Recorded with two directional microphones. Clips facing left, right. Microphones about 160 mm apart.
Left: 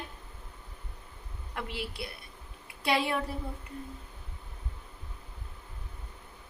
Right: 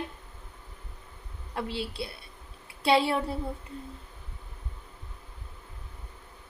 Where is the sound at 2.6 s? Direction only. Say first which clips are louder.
Right 5 dB; 30° right (ahead or behind).